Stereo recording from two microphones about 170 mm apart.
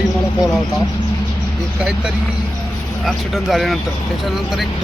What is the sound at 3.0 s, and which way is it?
Speech, centre (ahead or behind).